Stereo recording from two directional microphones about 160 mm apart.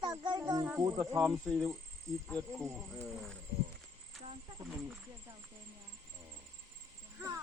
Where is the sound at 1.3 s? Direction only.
Centre (ahead or behind).